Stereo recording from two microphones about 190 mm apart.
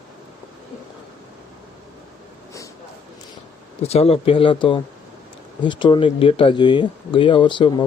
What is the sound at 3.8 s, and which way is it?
Speech, 30° left (ahead or behind).